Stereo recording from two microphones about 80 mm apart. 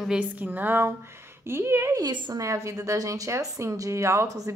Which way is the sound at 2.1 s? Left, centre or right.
Right.